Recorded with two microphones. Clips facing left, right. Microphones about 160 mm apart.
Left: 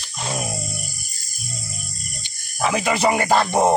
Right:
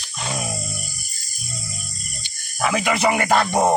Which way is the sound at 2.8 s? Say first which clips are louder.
Left 1 dB; 30° left (ahead or behind).